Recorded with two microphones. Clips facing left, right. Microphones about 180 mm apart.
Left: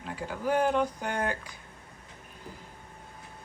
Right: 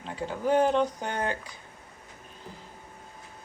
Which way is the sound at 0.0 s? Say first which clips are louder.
Right 2 dB; 10° left (ahead or behind).